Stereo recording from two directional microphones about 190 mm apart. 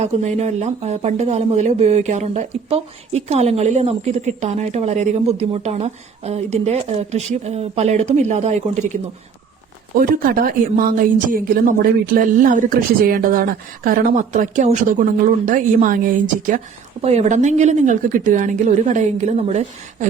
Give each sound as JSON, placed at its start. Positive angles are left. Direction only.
{"t": 0.0, "sound": "speech", "side_deg": -35}
{"t": 9.9, "sound": "speech", "side_deg": -50}
{"t": 17.0, "sound": "speech", "side_deg": -35}